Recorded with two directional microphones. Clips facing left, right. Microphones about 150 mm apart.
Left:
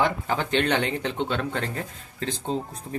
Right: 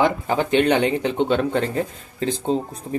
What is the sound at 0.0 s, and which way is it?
Speech, 15° right (ahead or behind).